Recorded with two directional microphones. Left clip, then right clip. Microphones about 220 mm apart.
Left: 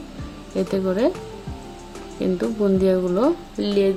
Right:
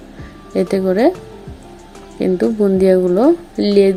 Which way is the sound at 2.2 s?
20° right (ahead or behind).